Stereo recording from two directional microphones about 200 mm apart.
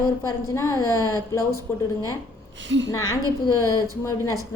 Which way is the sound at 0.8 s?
15° left (ahead or behind).